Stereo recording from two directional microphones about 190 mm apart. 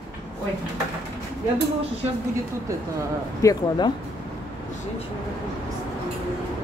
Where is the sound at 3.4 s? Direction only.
20° left (ahead or behind).